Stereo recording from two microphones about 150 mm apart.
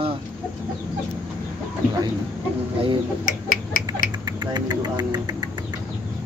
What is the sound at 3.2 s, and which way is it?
Finger snapping, 65° left (ahead or behind).